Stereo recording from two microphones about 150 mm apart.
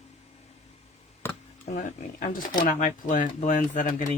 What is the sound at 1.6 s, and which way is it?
Speech, 55° left (ahead or behind).